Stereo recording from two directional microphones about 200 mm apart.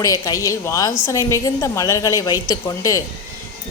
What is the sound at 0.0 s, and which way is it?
Speech, 15° left (ahead or behind).